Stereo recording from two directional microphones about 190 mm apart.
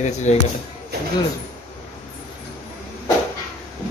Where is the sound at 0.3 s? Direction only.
35° left (ahead or behind).